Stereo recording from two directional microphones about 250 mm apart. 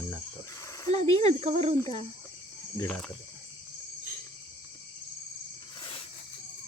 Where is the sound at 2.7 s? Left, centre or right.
Centre.